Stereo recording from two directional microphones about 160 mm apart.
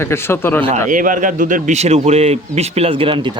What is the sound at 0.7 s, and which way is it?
A man's voice, 55° right (ahead or behind).